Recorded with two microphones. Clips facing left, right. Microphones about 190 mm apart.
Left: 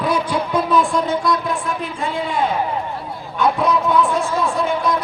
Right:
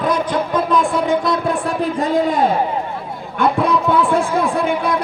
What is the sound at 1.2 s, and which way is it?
A man's voice, 30° right (ahead or behind).